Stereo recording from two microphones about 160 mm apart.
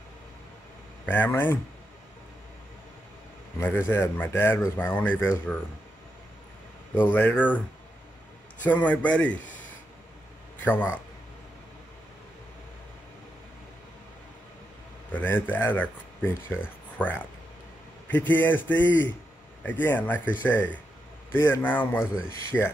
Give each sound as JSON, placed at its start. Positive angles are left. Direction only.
{"t": 1.0, "sound": "speech", "side_deg": 10}
{"t": 3.5, "sound": "speech", "side_deg": 15}
{"t": 7.0, "sound": "speech", "side_deg": 10}
{"t": 8.6, "sound": "speech", "side_deg": 10}
{"t": 10.6, "sound": "a man's voice", "side_deg": 10}
{"t": 15.1, "sound": "speech", "side_deg": 10}